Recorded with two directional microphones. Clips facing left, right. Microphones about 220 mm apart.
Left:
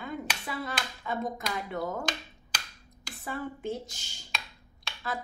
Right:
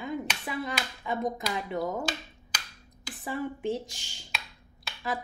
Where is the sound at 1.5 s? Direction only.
20° right (ahead or behind).